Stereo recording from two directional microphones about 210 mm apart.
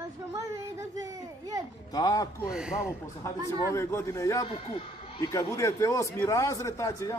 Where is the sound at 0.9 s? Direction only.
15° right (ahead or behind).